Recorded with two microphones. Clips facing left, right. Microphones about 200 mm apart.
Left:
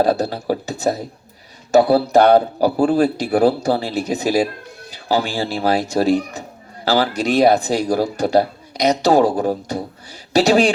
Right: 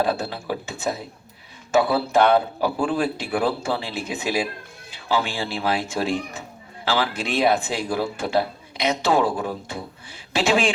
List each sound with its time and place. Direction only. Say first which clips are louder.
0.0 s speech: left 6 dB; 40° left (ahead or behind)